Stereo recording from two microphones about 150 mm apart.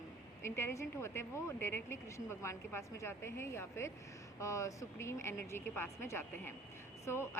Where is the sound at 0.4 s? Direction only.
15° left (ahead or behind).